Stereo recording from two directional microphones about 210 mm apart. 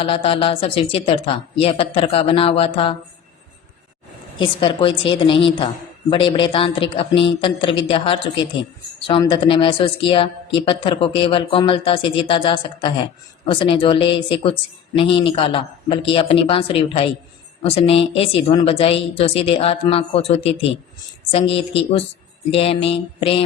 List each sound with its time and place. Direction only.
0.0 s a woman's voice: 25° left (ahead or behind)
4.4 s a woman's voice: 25° left (ahead or behind)